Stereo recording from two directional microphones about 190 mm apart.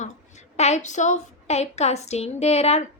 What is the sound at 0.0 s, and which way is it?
A woman's voice, 35° left (ahead or behind).